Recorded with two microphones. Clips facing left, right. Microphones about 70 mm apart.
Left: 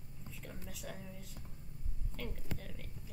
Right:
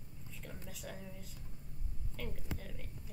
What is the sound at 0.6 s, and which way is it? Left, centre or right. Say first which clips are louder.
A woman's voice: even; centre.